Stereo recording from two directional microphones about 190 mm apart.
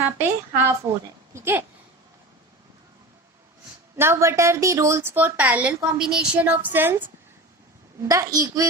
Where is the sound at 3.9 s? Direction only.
15° right (ahead or behind).